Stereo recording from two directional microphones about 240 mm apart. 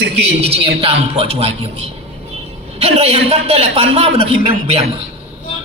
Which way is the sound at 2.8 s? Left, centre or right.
Right.